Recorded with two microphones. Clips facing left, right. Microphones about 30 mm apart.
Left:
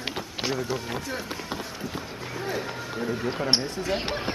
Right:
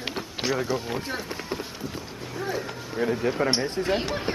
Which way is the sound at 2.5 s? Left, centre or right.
Centre.